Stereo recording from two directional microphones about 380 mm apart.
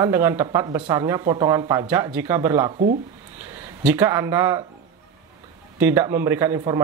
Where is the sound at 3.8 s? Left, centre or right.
Centre.